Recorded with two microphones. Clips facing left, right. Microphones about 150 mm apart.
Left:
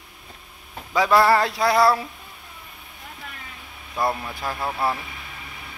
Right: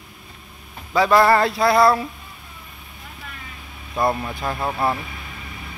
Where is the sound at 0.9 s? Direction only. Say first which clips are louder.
Right 2 dB; 10° left (ahead or behind).